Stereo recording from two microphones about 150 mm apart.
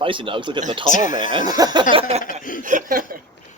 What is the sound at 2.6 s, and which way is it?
Speech, 65° right (ahead or behind).